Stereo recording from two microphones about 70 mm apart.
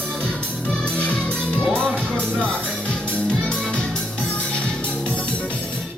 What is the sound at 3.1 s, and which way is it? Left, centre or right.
Music, centre.